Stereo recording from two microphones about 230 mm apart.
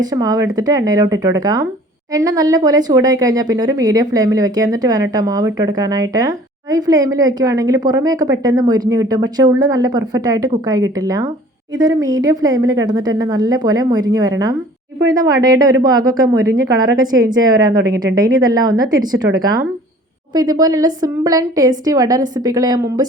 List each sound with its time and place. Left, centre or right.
0.0 s a woman's voice: centre